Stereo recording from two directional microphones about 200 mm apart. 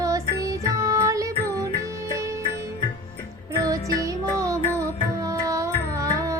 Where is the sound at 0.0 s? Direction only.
15° right (ahead or behind).